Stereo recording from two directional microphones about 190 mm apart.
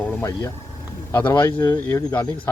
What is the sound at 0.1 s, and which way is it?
Speech, 15° left (ahead or behind).